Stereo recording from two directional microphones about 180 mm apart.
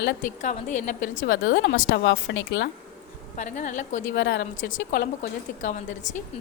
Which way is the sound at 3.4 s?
45° left (ahead or behind).